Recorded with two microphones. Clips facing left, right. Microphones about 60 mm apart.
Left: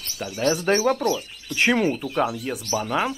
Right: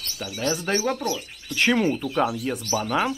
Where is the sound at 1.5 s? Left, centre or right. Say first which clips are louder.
Left 1 dB; centre.